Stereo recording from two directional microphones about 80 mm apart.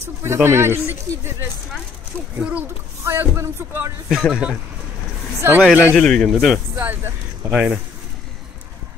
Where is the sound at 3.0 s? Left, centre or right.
Right.